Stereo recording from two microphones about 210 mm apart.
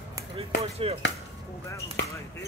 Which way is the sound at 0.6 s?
30° right (ahead or behind).